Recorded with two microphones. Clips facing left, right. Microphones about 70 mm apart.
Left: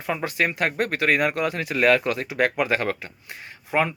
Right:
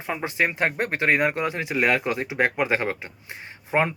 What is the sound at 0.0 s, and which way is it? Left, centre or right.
Speech, centre.